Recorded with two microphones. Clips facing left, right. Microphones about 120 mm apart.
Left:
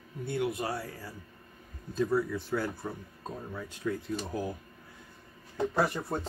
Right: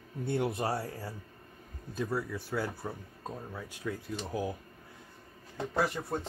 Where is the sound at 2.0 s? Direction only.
10° right (ahead or behind).